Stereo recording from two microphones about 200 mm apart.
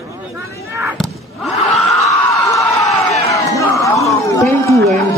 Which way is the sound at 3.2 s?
15° left (ahead or behind).